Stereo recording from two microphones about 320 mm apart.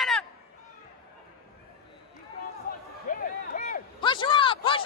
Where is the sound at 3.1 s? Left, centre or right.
Left.